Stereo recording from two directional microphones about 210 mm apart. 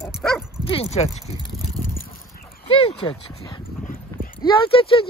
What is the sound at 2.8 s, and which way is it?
Speech, 25° left (ahead or behind).